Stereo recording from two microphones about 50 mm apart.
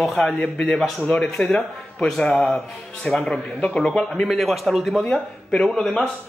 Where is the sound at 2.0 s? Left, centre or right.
Centre.